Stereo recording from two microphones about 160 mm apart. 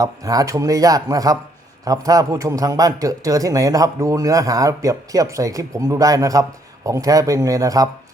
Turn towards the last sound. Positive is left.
turn(degrees=-20)  # may be behind; listen again after turning